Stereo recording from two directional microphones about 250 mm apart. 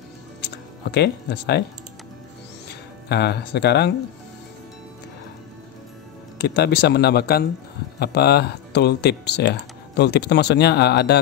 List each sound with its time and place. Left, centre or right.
0.9 s speech: left
2.7 s speech: left
6.4 s speech: left